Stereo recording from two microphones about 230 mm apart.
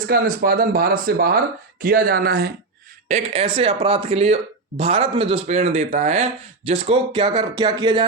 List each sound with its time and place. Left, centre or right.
0.1 s speech: right
3.1 s speech: right